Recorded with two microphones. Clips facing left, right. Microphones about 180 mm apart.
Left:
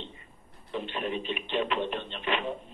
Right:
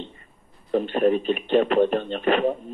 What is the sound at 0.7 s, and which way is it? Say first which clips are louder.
A man's voice: right 13 dB; 45° right (ahead or behind).